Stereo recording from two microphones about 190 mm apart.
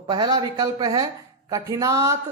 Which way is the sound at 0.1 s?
20° right (ahead or behind).